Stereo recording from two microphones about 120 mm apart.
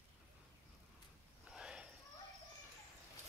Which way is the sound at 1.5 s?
5° right (ahead or behind).